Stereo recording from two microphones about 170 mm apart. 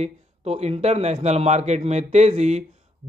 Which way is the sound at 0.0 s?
40° right (ahead or behind).